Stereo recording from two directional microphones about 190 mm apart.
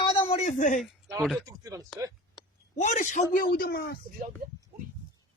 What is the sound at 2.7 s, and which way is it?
A man's voice, 40° left (ahead or behind).